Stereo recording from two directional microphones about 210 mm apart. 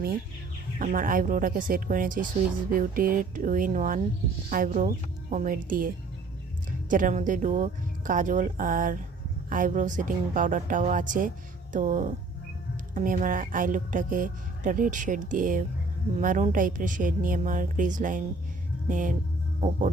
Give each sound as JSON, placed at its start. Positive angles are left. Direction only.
{"t": 0.8, "sound": "speech", "side_deg": -40}